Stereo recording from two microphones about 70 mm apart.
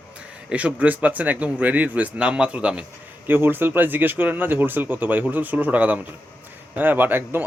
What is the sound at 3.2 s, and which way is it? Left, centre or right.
Speech, right.